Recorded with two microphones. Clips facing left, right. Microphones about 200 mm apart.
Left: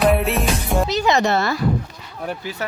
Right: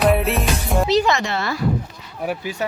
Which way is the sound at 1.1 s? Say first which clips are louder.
Left 5 dB; 40° left (ahead or behind).